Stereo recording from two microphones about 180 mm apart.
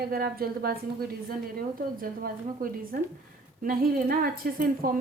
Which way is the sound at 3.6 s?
55° right (ahead or behind).